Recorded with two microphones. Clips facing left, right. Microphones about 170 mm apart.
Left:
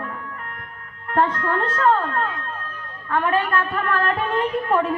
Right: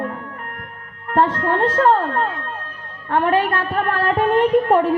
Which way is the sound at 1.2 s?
40° right (ahead or behind).